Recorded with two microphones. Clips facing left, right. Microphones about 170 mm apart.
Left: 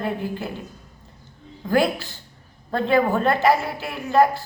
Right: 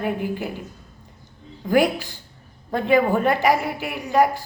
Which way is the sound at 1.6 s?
15° right (ahead or behind).